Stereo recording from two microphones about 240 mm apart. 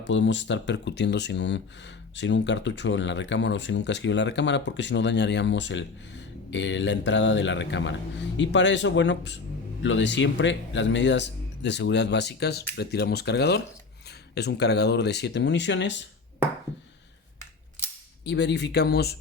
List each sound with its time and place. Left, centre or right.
0.0 s speech: left
18.3 s speech: left